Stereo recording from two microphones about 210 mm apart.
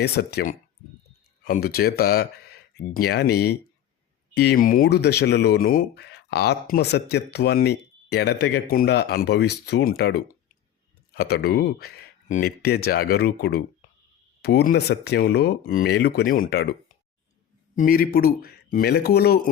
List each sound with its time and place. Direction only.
0.0 s speech: 50° left (ahead or behind)
17.7 s speech: 45° left (ahead or behind)